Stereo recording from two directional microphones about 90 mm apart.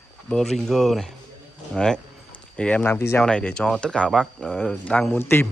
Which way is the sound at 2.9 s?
30° left (ahead or behind).